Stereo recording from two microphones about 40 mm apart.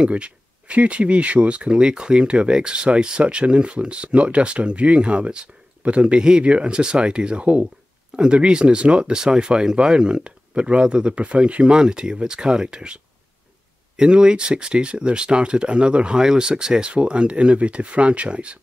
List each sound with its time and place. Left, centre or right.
0.0 s speech: right